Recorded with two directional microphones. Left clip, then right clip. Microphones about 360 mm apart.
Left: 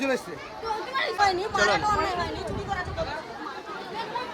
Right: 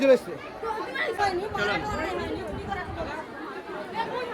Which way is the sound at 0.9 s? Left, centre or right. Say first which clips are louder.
Left 4 dB; left.